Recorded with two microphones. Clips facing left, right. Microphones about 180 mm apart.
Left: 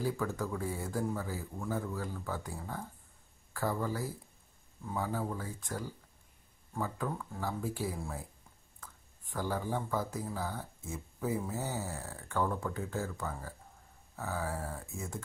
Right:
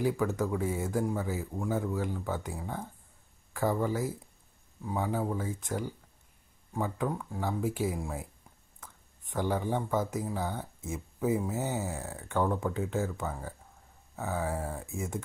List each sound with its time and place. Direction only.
0.0 s speech: 20° right (ahead or behind)